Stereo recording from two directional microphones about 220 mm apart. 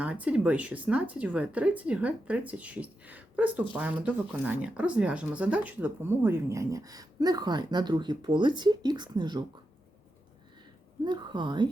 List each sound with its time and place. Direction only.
0.0 s speech: 5° right (ahead or behind)
11.0 s a woman's voice: 20° right (ahead or behind)